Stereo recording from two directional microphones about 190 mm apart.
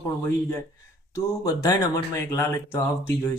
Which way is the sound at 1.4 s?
15° left (ahead or behind).